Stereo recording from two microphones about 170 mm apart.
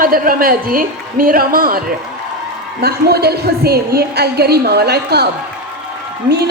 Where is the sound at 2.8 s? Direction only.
70° right (ahead or behind).